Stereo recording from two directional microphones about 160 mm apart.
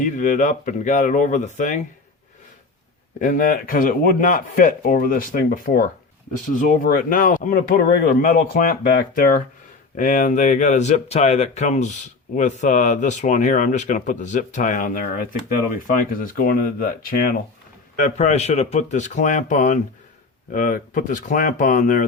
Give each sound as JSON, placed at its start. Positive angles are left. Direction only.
{"t": 0.0, "sound": "speech", "side_deg": 50}
{"t": 3.2, "sound": "speech", "side_deg": 60}
{"t": 18.0, "sound": "speech", "side_deg": 45}